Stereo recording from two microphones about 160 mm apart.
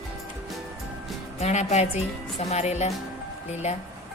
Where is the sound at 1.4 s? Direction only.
45° left (ahead or behind).